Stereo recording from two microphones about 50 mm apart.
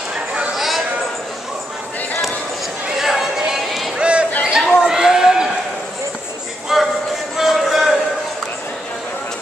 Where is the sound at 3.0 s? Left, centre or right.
Centre.